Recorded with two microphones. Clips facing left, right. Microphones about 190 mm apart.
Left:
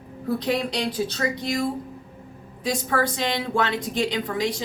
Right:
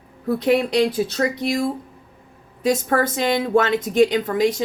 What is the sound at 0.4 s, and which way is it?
Speech, 60° right (ahead or behind).